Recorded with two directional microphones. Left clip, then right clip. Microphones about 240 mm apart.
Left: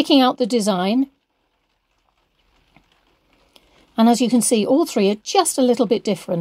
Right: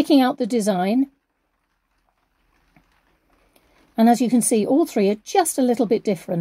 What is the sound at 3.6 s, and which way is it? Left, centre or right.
A woman's voice, centre.